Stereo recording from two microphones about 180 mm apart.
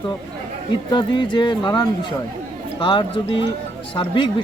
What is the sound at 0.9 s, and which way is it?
Speech, 25° left (ahead or behind).